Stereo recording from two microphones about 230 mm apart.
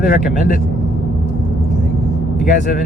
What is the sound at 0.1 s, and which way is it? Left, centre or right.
Speech, left.